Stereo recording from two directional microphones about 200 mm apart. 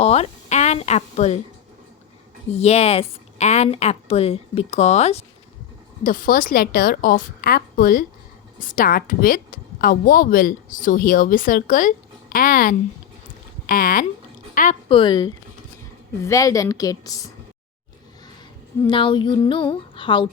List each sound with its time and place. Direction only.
0.0 s speech: 30° left (ahead or behind)
2.5 s a woman's voice: 30° left (ahead or behind)
14.8 s a woman's voice: 25° left (ahead or behind)
18.9 s speech: 25° left (ahead or behind)